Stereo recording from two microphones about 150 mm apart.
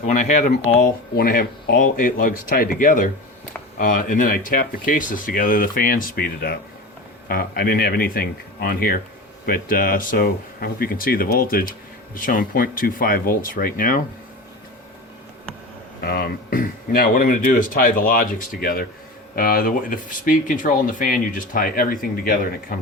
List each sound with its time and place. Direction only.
0.0 s speech: 50° left (ahead or behind)
1.1 s speech: 85° left
12.1 s speech: 65° left (ahead or behind)
16.0 s speech: 85° left; by 22.8 s 70° left (ahead or behind)